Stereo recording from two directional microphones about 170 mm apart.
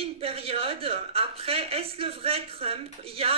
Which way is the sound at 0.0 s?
35° right (ahead or behind).